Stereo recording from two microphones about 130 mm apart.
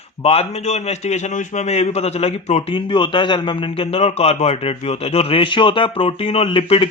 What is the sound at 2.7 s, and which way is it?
A man's voice, 40° left (ahead or behind).